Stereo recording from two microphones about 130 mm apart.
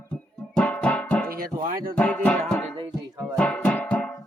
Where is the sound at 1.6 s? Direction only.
90° right.